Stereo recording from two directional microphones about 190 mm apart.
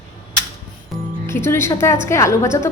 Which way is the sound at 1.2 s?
15° left (ahead or behind).